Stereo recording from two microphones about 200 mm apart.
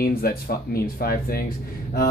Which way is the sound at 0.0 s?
50° left (ahead or behind).